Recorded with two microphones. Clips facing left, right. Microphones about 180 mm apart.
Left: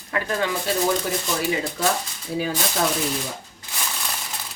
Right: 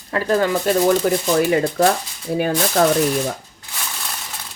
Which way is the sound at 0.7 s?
50° right (ahead or behind).